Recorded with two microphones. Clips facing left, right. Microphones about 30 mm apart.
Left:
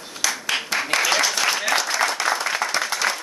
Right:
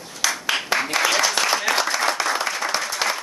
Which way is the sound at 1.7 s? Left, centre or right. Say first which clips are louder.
Even; centre.